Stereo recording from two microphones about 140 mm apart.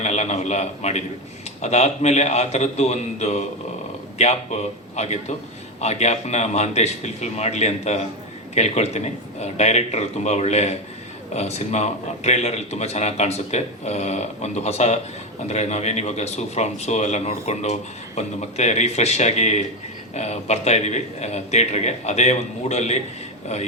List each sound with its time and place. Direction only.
0.0 s a man's voice: 55° left (ahead or behind)